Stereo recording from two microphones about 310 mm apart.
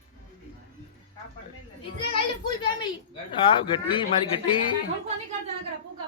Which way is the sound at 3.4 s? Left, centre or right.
Centre.